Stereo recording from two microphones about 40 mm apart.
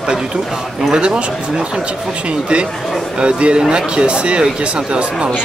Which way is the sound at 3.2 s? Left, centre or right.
Right.